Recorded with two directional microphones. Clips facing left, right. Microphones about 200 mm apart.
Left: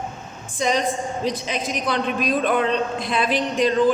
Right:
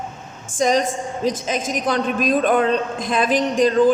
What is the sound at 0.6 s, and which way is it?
A man's voice, 45° right (ahead or behind).